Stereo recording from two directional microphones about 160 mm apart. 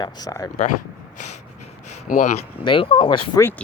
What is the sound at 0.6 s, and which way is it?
Speech, 50° left (ahead or behind).